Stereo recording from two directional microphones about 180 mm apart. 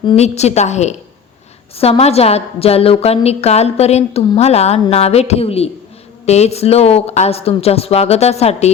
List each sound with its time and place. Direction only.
0.0 s a woman's voice: 30° left (ahead or behind)